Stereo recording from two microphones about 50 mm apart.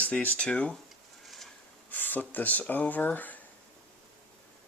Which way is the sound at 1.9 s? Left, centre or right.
Left.